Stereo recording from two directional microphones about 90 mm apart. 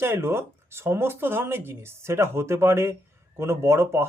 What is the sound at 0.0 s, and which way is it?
Speech, 30° right (ahead or behind).